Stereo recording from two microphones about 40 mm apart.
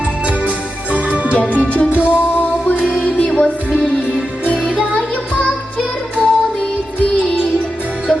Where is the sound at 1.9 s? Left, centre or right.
Right.